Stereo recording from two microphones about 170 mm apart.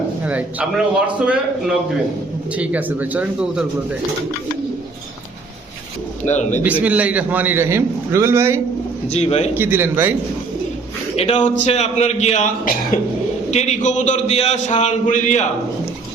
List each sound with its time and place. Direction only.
0.3 s a man's voice: 5° right (ahead or behind)
6.2 s a man's voice: 45° left (ahead or behind)
6.6 s a man's voice: 10° right (ahead or behind)
9.0 s speech: 40° left (ahead or behind)
9.6 s a man's voice: 10° right (ahead or behind)
11.2 s a man's voice: 40° left (ahead or behind)